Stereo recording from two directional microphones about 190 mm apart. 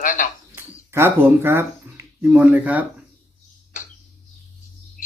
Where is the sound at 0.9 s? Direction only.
10° right (ahead or behind).